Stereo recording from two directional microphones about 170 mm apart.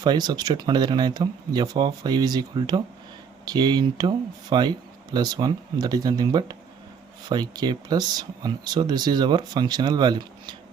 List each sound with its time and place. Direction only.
0.0 s speech: 25° right (ahead or behind)